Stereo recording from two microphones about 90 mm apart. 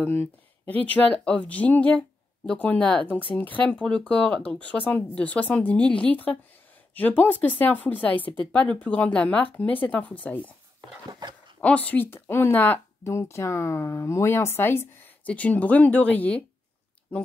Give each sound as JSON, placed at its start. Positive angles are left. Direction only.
{"t": 0.0, "sound": "speech", "side_deg": 20}
{"t": 11.1, "sound": "speech", "side_deg": -55}
{"t": 11.6, "sound": "speech", "side_deg": 15}
{"t": 13.0, "sound": "speech", "side_deg": 30}